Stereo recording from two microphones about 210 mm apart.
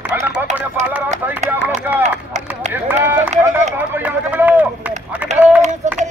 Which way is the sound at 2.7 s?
10° right (ahead or behind).